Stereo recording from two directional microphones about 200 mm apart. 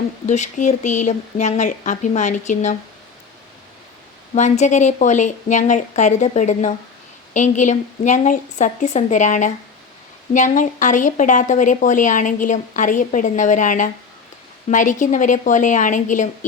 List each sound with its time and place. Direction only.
0.3 s a woman's voice: 35° left (ahead or behind)
4.4 s a woman's voice: 35° left (ahead or behind)